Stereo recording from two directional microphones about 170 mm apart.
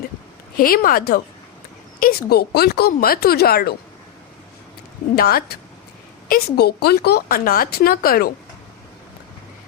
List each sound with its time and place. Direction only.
0.5 s a woman's voice: 60° left (ahead or behind)
5.1 s a woman's voice: 65° left (ahead or behind)